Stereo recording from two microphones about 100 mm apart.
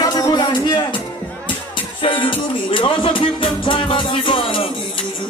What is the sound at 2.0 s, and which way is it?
Music, 60° left (ahead or behind).